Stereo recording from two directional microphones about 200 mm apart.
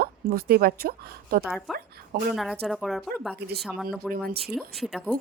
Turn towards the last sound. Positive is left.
turn(degrees=0)  # may be behind; listen again after turning